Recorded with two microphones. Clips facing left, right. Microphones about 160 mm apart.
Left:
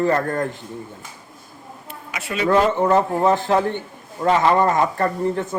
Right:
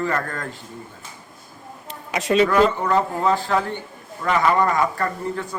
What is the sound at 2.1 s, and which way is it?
Speech, 30° right (ahead or behind).